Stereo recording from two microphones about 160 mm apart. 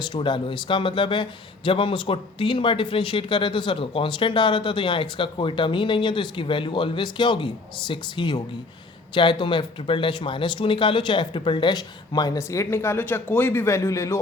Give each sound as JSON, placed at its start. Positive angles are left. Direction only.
{"t": 0.0, "sound": "speech", "side_deg": 30}